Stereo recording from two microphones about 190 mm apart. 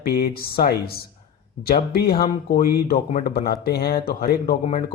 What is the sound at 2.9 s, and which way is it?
Speech, 40° left (ahead or behind).